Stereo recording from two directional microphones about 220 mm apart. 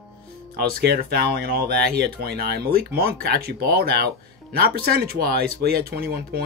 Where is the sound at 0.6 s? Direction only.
45° right (ahead or behind).